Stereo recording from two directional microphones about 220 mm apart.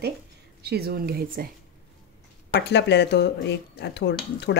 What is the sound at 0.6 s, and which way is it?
Speech, 45° right (ahead or behind).